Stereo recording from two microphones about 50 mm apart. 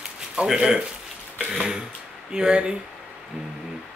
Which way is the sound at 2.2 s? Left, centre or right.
Centre.